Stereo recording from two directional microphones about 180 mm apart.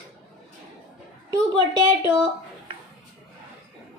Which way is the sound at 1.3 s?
25° right (ahead or behind).